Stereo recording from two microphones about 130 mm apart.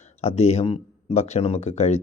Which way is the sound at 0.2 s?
55° left (ahead or behind).